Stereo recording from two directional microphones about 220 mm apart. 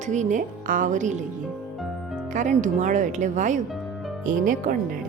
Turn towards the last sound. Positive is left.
turn(degrees=-35)  # may be behind; listen again after turning